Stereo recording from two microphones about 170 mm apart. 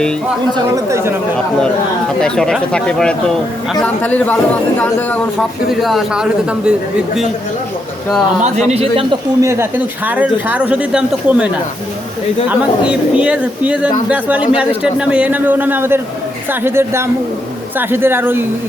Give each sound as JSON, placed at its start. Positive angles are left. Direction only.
{"t": 0.5, "sound": "speech", "side_deg": -15}
{"t": 2.2, "sound": "a man's voice", "side_deg": 5}
{"t": 8.7, "sound": "a man's voice", "side_deg": -35}
{"t": 9.4, "sound": "speech", "side_deg": -15}
{"t": 12.5, "sound": "speech", "side_deg": -5}